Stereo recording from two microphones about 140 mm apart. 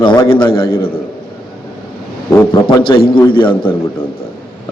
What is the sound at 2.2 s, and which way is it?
Speech, 20° left (ahead or behind).